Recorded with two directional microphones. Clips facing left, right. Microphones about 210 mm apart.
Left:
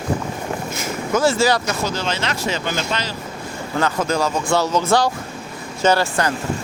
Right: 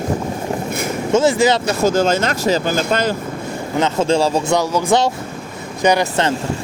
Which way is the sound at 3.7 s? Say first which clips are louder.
Right 4 dB; 25° right (ahead or behind).